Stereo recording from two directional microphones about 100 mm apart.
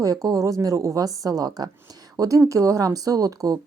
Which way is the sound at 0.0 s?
35° right (ahead or behind).